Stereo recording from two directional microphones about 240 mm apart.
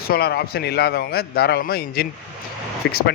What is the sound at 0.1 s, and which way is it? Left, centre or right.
A man's voice, left.